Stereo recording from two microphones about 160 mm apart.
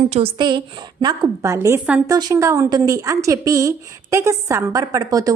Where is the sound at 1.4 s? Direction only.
15° right (ahead or behind).